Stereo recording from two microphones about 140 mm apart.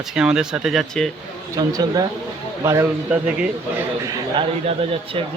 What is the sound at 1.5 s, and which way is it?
Speech, 25° right (ahead or behind).